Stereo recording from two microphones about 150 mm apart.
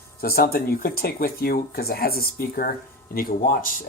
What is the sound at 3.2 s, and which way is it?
Speech, 70° left (ahead or behind).